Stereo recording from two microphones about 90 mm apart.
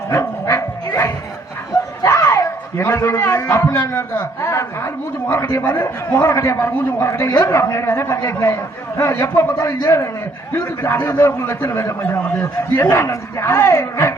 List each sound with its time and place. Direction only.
0.1 s bow-wow: 30° left (ahead or behind)
2.0 s a man's voice: 35° left (ahead or behind)
5.3 s a man's voice: 30° left (ahead or behind)